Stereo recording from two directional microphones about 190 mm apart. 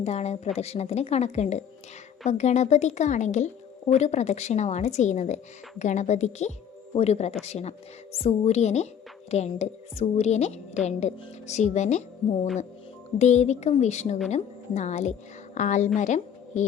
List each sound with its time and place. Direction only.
0.0 s a woman's voice: 35° left (ahead or behind)
13.1 s a woman's voice: 35° left (ahead or behind)